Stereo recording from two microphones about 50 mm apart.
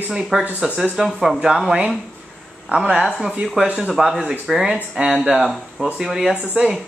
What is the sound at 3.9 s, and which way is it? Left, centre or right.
Speech, centre.